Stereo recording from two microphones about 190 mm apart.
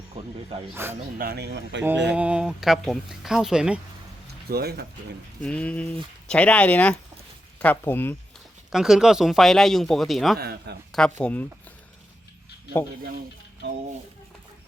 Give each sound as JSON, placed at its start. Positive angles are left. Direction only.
{"t": 0.7, "sound": "speech", "side_deg": -10}
{"t": 1.2, "sound": "speech", "side_deg": -55}
{"t": 2.1, "sound": "speech", "side_deg": -5}
{"t": 4.4, "sound": "speech", "side_deg": -55}
{"t": 5.4, "sound": "speech", "side_deg": 5}
{"t": 8.7, "sound": "speech", "side_deg": -5}
{"t": 10.3, "sound": "speech", "side_deg": -60}
{"t": 10.9, "sound": "speech", "side_deg": 5}